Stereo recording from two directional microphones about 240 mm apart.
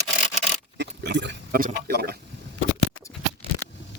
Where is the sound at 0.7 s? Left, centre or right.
Right.